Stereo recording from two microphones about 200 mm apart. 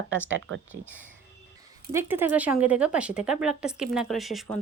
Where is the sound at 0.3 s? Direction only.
75° right (ahead or behind).